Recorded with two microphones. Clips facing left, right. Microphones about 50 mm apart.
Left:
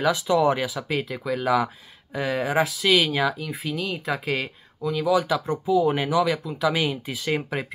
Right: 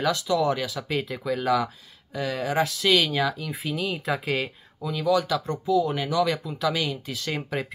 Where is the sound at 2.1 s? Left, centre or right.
Left.